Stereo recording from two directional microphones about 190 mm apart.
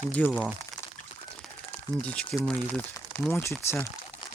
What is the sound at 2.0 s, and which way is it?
Speech, 5° left (ahead or behind).